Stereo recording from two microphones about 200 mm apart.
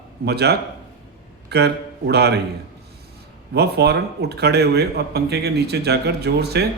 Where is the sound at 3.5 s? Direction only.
55° right (ahead or behind).